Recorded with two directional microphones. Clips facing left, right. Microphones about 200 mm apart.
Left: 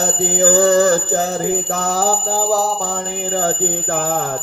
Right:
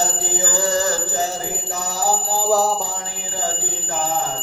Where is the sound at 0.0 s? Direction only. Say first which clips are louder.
Left 8 dB; 60° left (ahead or behind).